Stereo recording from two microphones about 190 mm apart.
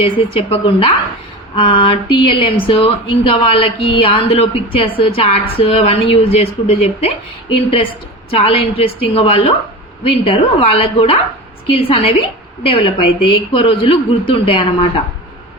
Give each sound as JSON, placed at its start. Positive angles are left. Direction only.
{"t": 0.0, "sound": "a woman's voice", "side_deg": 30}
{"t": 8.3, "sound": "speech", "side_deg": 30}